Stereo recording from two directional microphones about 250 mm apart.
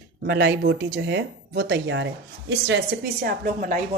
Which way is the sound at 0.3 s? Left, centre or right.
Right.